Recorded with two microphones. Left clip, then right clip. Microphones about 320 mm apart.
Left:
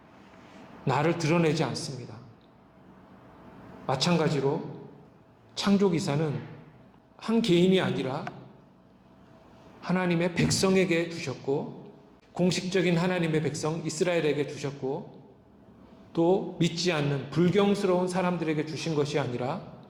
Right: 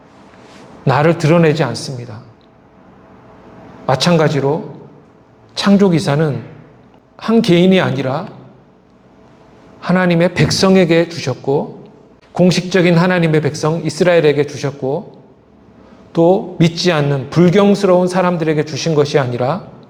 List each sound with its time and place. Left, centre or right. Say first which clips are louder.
0.9 s a man's voice: right 14 dB; right
3.8 s a man's voice: right 14 dB; right
5.5 s a man's voice: right 13 dB; right
9.8 s a man's voice: right 14 dB; right
12.3 s a man's voice: right 14 dB; right
16.1 s a man's voice: right 13 dB; right